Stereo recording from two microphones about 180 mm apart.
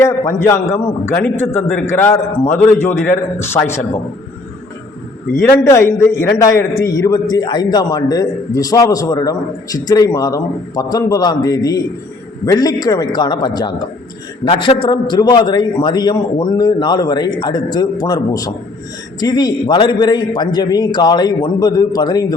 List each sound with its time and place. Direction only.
0.0 s a man's voice: 15° left (ahead or behind)
5.5 s a man's voice: 15° left (ahead or behind)